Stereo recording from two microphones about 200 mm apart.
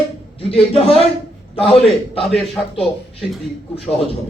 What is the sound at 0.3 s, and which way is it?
A man's voice, 30° left (ahead or behind).